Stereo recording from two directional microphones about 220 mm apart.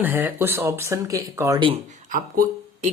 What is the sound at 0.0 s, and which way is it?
Speech, 10° right (ahead or behind).